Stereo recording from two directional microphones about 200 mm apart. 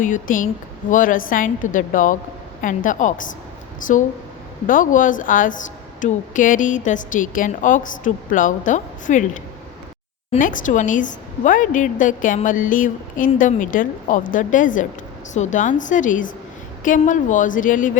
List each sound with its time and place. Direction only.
0.0 s a woman's voice: 40° left (ahead or behind)